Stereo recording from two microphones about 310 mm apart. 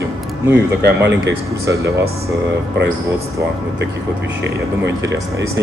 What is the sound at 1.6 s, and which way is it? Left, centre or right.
Speech, centre.